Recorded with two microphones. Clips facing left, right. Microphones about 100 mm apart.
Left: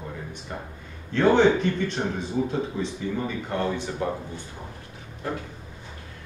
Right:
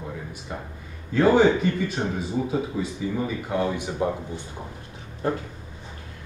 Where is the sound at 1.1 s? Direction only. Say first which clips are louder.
Right 1 dB; 5° right (ahead or behind).